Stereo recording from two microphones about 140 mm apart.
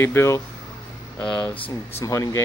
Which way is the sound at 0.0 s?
20° left (ahead or behind).